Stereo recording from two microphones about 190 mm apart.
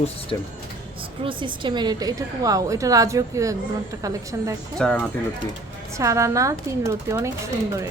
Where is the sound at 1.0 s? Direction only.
25° right (ahead or behind).